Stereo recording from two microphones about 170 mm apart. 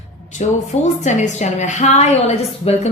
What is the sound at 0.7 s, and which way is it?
A woman's voice, 45° left (ahead or behind).